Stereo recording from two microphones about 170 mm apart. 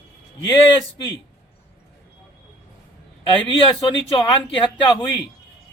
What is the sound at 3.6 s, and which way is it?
A man's voice, 30° left (ahead or behind).